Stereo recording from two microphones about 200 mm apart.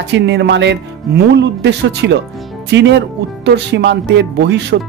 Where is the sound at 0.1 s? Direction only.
60° right (ahead or behind).